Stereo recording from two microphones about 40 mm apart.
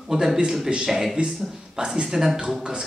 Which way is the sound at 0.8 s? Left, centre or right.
Centre.